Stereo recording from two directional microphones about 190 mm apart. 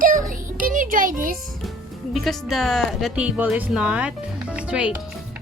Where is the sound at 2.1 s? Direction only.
Centre (ahead or behind).